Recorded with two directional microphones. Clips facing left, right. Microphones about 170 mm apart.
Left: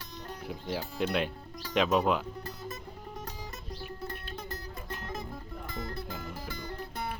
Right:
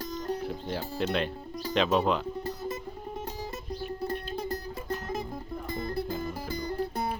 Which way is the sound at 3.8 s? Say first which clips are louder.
Right 8 dB; 35° right (ahead or behind).